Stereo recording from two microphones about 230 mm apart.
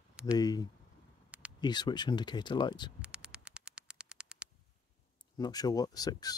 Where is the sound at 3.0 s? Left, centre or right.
Centre.